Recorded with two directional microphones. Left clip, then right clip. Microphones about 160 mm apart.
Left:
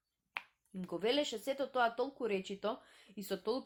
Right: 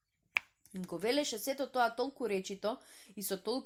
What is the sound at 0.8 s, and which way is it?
Speech, 45° right (ahead or behind).